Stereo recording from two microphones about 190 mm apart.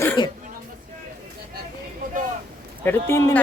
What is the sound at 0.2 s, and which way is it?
Speech, 25° left (ahead or behind).